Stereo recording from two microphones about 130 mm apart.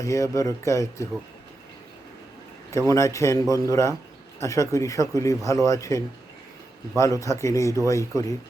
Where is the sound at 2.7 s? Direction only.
25° left (ahead or behind).